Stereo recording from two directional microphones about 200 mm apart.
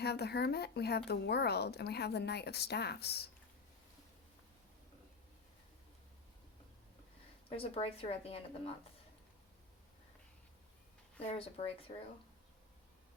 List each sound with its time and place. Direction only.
0.0 s a woman's voice: 55° left (ahead or behind)
7.5 s speech: 30° left (ahead or behind)
11.3 s speech: 30° left (ahead or behind)